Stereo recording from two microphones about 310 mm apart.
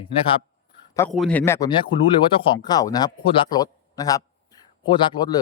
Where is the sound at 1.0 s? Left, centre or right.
Centre.